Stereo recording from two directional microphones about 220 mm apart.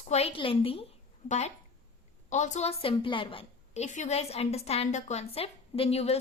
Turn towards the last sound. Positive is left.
turn(degrees=30)  # may be behind; listen again after turning